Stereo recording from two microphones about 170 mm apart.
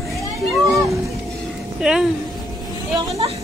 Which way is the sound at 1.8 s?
5° right (ahead or behind).